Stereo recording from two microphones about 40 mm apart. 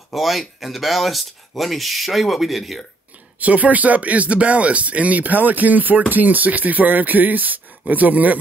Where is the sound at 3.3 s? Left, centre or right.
Right.